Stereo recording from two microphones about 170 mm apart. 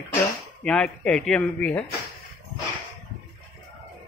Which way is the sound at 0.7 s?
5° left (ahead or behind).